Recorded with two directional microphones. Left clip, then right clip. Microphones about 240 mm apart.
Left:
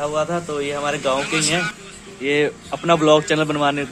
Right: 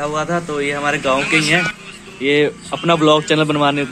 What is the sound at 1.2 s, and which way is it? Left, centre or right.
Speech, left.